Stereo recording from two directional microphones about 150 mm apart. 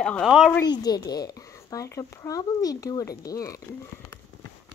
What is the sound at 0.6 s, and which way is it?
A child's voice, 30° left (ahead or behind).